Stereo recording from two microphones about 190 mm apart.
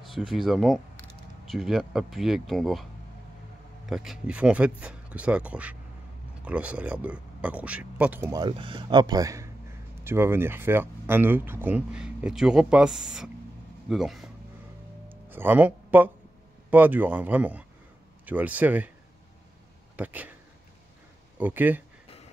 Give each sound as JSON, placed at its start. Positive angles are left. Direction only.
{"t": 0.0, "sound": "speech", "side_deg": 0}
{"t": 15.0, "sound": "music", "side_deg": -10}
{"t": 16.7, "sound": "speech", "side_deg": -10}
{"t": 20.0, "sound": "speech", "side_deg": -10}
{"t": 21.4, "sound": "speech", "side_deg": -10}